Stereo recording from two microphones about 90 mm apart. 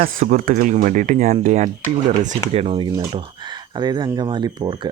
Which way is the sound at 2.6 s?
70° right (ahead or behind).